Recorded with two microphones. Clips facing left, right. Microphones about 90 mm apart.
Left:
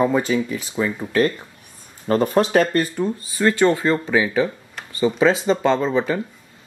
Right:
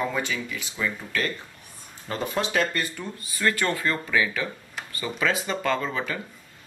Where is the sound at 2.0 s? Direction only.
45° left (ahead or behind).